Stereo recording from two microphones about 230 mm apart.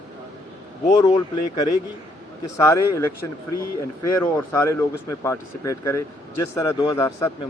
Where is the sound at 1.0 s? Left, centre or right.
Centre.